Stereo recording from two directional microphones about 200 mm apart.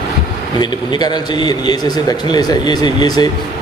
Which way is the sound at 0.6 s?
20° left (ahead or behind).